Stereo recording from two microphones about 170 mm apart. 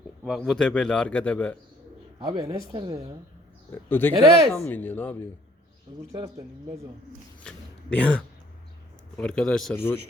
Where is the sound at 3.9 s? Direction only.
10° left (ahead or behind).